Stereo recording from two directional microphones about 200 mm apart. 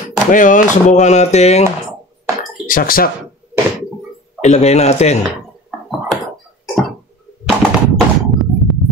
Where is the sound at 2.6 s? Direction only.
45° left (ahead or behind).